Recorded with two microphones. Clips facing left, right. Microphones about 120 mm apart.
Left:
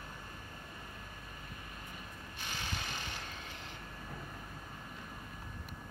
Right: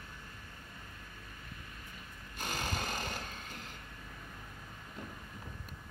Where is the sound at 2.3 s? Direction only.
45° right (ahead or behind).